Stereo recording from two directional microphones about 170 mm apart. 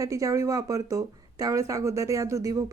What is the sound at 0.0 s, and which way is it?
Speech, 20° right (ahead or behind).